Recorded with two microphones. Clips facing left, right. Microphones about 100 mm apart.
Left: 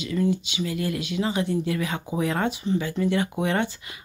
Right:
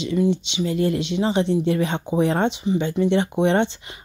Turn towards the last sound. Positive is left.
turn(degrees=-25)  # may be behind; listen again after turning